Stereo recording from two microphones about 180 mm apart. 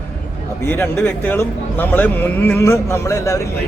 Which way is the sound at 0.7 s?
10° left (ahead or behind).